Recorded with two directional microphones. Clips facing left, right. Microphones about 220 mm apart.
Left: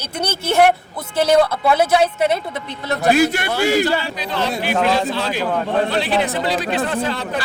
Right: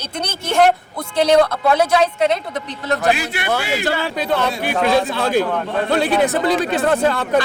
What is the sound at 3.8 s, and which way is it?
Speech, 50° right (ahead or behind).